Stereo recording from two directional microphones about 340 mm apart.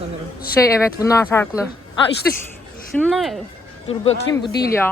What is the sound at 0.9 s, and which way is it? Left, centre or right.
Speech, centre.